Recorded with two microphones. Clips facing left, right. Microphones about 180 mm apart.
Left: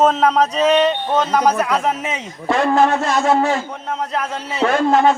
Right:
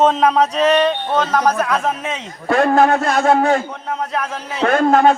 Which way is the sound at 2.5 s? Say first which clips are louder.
Right 2 dB; 55° right (ahead or behind).